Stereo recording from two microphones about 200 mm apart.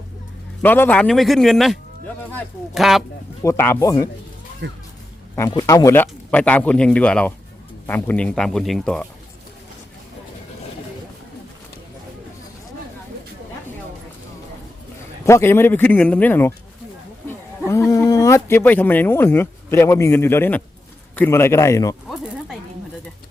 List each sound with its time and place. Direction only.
0.6 s a man's voice: 10° left (ahead or behind)
3.4 s speech: 10° left (ahead or behind)
4.6 s speech: 60° right (ahead or behind)
5.4 s a man's voice: 15° left (ahead or behind)
15.3 s speech: 10° left (ahead or behind)
17.7 s speech: 15° left (ahead or behind)